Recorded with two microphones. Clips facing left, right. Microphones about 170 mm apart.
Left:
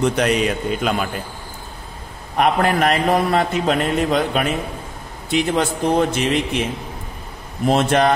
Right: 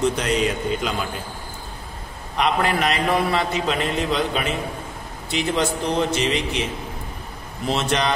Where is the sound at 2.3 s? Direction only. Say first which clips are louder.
Left 4 dB; 50° left (ahead or behind).